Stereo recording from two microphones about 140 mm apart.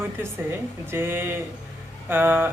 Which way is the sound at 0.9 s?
15° right (ahead or behind).